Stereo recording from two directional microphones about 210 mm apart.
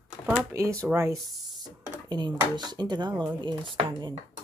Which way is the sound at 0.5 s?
15° right (ahead or behind).